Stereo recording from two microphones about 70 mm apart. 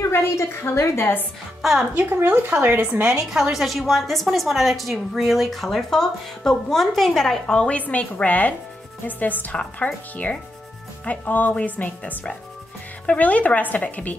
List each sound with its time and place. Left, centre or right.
0.1 s a woman's voice: left
1.6 s a woman's voice: centre
2.0 s a woman's voice: right
3.0 s a woman's voice: centre; by 14.1 s left